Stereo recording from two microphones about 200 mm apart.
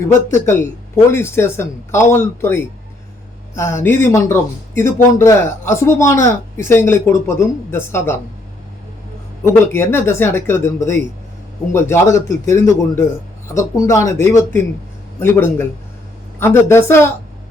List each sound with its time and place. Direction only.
0.3 s speech: 15° left (ahead or behind)
9.4 s speech: 10° left (ahead or behind)